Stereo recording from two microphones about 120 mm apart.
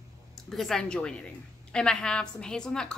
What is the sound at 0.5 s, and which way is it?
A woman's voice, 5° left (ahead or behind).